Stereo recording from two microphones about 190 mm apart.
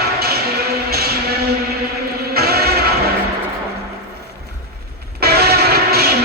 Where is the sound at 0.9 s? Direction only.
55° right (ahead or behind).